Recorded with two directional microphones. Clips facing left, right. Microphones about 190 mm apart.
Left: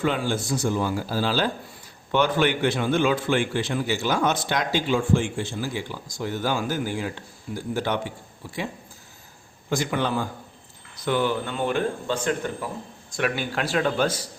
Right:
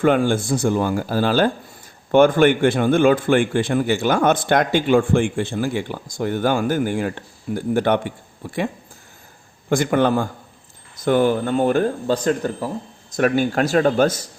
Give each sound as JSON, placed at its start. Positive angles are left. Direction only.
{"t": 0.0, "sound": "a man's voice", "side_deg": -55}